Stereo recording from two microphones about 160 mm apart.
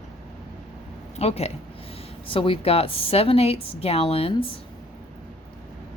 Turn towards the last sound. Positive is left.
turn(degrees=35)  # may be behind; listen again after turning